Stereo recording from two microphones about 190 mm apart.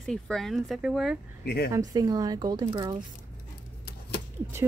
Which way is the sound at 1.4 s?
55° left (ahead or behind).